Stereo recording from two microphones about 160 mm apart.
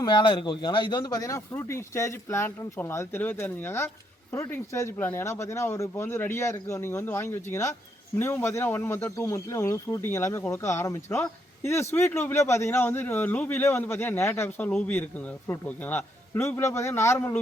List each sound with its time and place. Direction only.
0.0 s speech: 30° left (ahead or behind)